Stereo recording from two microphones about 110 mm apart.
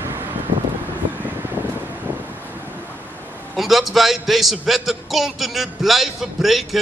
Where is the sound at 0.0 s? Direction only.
20° right (ahead or behind).